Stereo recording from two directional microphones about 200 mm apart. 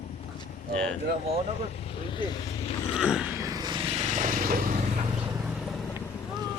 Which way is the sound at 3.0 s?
5° right (ahead or behind).